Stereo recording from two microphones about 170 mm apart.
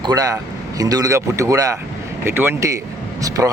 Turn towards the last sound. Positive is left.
turn(degrees=-20)  # may be behind; listen again after turning